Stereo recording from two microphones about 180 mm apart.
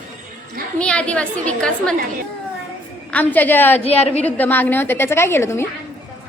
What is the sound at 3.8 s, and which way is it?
Speech, 35° left (ahead or behind).